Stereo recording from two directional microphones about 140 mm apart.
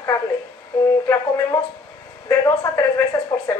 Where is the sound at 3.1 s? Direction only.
25° left (ahead or behind).